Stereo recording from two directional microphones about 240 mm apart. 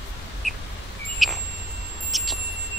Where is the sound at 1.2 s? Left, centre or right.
Centre.